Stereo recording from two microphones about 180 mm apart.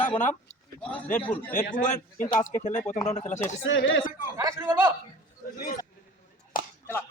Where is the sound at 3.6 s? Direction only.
90° left.